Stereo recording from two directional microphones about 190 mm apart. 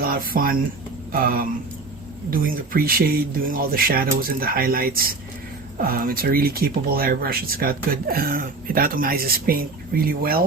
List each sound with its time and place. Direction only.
0.0 s speech: 50° right (ahead or behind)